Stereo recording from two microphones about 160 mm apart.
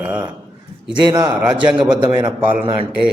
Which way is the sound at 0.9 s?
25° right (ahead or behind).